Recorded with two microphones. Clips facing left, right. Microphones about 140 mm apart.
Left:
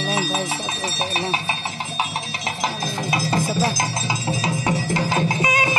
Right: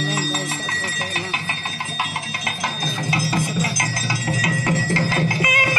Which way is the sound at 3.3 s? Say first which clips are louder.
Left 2 dB; 30° left (ahead or behind).